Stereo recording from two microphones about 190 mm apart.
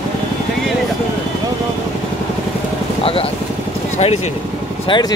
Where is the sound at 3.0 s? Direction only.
30° left (ahead or behind).